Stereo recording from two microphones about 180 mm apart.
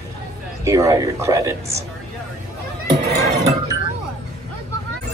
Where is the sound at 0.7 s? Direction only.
20° right (ahead or behind).